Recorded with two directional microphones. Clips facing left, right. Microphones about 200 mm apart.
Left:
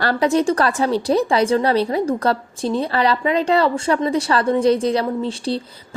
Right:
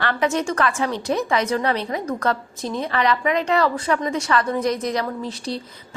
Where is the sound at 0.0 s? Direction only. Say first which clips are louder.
Left 5 dB; 35° left (ahead or behind).